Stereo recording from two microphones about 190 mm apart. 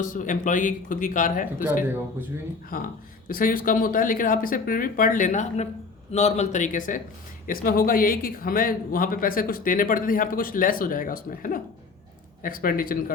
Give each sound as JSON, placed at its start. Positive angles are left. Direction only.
{"t": 0.0, "sound": "speech", "side_deg": 45}
{"t": 2.2, "sound": "speech", "side_deg": -10}
{"t": 2.7, "sound": "a man's voice", "side_deg": 50}